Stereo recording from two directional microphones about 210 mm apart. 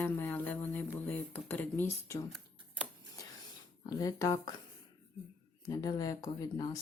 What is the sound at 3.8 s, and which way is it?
Speech, 15° left (ahead or behind).